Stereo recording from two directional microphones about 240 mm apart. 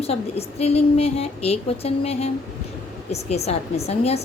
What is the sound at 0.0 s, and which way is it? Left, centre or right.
A woman's voice, left.